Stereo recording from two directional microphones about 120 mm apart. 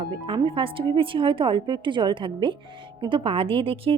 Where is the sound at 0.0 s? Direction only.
40° right (ahead or behind).